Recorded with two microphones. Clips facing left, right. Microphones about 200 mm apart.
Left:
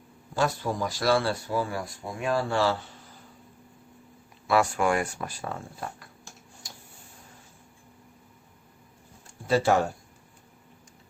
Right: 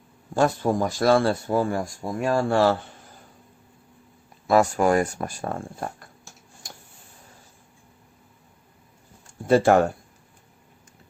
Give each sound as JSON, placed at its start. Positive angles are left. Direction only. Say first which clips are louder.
{"t": 0.3, "sound": "speech", "louder": "right 6 dB", "side_deg": -50}
{"t": 4.4, "sound": "speech", "louder": "right 5 dB", "side_deg": -40}
{"t": 9.5, "sound": "speech", "louder": "right 6 dB", "side_deg": -50}